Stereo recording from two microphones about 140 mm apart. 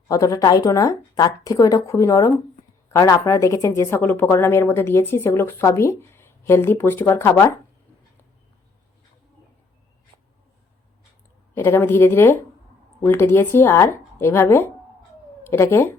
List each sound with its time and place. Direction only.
0.1 s speech: 25° left (ahead or behind)
11.5 s speech: 15° left (ahead or behind)